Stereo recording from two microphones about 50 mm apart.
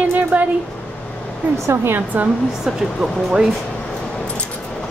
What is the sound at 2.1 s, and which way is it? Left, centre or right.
Speech, right.